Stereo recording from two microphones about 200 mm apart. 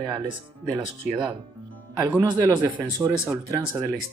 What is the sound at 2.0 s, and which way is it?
Speech, 10° right (ahead or behind).